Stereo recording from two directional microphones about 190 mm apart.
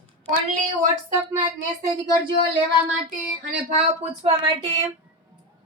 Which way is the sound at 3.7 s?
30° right (ahead or behind).